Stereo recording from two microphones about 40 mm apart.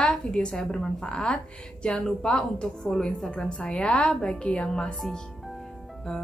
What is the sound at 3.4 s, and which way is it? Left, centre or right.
Speech, left.